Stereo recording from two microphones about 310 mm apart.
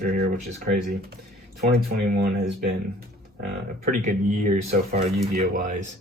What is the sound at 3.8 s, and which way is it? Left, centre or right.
Speech, right.